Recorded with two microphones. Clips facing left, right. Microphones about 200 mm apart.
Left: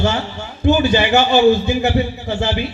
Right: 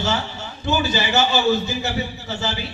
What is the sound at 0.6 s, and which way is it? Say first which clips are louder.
A man's voice: left 8 dB; 60° left (ahead or behind).